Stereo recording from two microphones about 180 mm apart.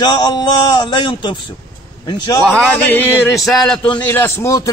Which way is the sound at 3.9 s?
15° left (ahead or behind).